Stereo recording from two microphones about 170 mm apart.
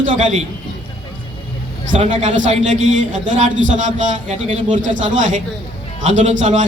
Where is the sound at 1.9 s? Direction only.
45° right (ahead or behind).